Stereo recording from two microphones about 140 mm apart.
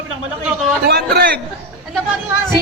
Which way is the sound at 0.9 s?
90° right.